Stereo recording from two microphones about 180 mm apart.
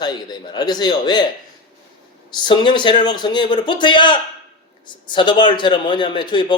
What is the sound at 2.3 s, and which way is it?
A man's voice, 25° left (ahead or behind).